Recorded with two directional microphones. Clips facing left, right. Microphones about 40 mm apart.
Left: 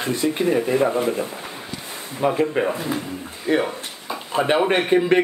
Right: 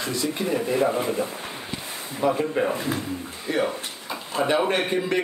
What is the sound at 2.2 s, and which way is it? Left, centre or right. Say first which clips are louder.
Speech: left 3 dB; left.